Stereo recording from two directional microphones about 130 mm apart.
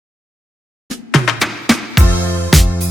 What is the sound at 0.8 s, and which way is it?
Music, centre (ahead or behind).